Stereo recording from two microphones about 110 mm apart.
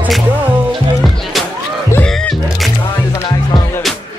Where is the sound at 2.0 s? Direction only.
10° left (ahead or behind).